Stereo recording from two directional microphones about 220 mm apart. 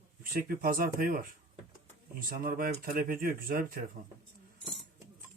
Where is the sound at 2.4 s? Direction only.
40° right (ahead or behind).